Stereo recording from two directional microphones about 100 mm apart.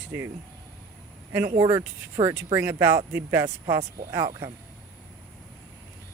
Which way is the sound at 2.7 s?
25° right (ahead or behind).